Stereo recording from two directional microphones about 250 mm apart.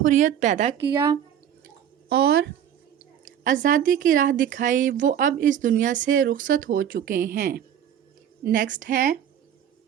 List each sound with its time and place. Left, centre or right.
0.0 s speech: right
0.8 s a woman's voice: centre
2.0 s speech: right